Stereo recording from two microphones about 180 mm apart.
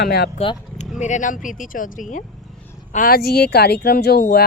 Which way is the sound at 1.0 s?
45° left (ahead or behind).